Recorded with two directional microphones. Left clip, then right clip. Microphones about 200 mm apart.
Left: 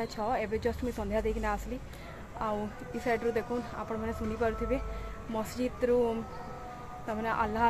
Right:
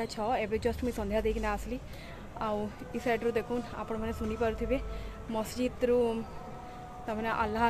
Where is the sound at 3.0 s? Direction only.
15° right (ahead or behind).